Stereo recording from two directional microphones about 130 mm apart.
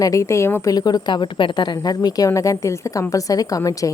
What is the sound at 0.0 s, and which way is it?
Speech, 25° left (ahead or behind).